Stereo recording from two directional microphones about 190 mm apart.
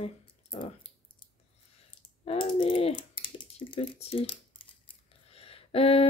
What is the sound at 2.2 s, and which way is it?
Speech, 30° left (ahead or behind).